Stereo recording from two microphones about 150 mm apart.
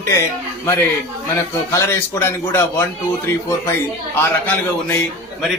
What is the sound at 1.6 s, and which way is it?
A man's voice, 20° left (ahead or behind).